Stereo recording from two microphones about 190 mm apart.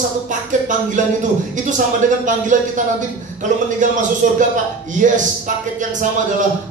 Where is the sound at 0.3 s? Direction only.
40° right (ahead or behind).